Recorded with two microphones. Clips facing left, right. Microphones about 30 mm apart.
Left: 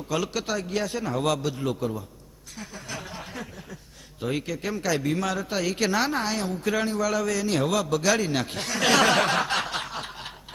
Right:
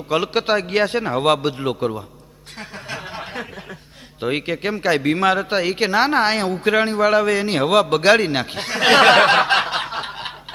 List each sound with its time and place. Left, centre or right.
0.1 s a man's voice: right
2.6 s a sound: right
4.2 s a man's voice: right
6.1 s a man's voice: right